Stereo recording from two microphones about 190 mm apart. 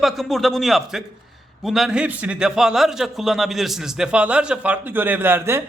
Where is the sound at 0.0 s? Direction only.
Centre (ahead or behind).